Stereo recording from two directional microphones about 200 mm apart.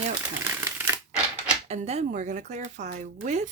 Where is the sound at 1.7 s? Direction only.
30° right (ahead or behind).